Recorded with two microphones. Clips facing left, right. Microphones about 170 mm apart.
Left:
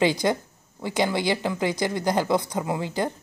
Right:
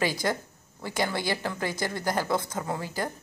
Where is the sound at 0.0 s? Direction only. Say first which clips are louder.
Left 6 dB; 20° left (ahead or behind).